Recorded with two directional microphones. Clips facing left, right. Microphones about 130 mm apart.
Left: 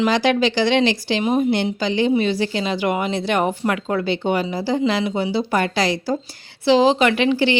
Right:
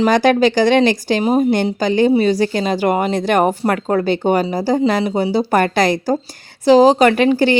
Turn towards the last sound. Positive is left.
turn(degrees=-45)  # may be behind; listen again after turning